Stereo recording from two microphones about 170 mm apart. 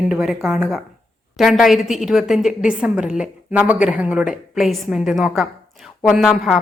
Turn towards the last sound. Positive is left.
turn(degrees=0)  # may be behind; listen again after turning